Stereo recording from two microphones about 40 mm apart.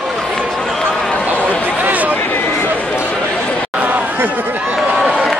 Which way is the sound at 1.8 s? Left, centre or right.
Right.